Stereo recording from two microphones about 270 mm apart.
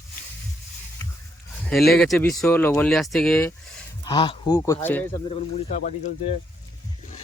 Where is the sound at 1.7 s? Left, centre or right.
Centre.